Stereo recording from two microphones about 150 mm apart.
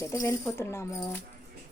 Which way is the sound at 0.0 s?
20° left (ahead or behind).